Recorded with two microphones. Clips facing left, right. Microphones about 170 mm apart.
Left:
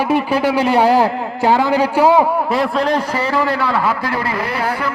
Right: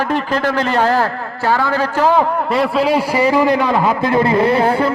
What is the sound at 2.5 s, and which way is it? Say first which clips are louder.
A man's voice: right 2 dB; centre (ahead or behind).